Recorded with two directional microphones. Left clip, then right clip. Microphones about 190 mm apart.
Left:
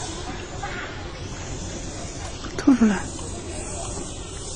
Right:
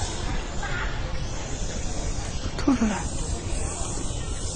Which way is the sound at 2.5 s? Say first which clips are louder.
Left 5 dB; 20° left (ahead or behind).